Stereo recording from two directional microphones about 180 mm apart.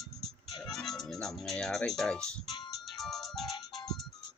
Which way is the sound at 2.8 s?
Centre (ahead or behind).